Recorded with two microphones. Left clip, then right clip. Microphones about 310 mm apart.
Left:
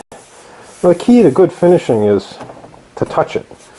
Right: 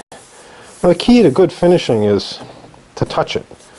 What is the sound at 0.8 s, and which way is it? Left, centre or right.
Sanding, centre.